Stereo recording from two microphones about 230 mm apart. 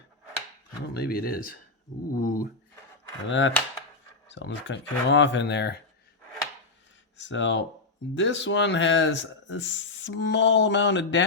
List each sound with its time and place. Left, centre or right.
0.9 s speech: left
3.2 s speech: left
7.2 s speech: left